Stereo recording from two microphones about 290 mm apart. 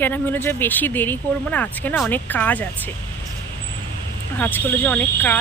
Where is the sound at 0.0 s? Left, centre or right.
Centre.